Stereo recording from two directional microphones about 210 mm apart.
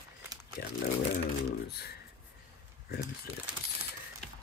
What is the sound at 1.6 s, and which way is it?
Speech, 50° left (ahead or behind).